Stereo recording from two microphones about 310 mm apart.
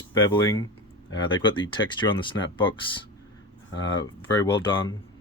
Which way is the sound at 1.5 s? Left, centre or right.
Centre.